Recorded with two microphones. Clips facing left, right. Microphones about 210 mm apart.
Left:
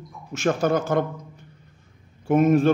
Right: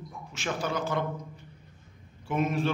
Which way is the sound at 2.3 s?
50° left (ahead or behind).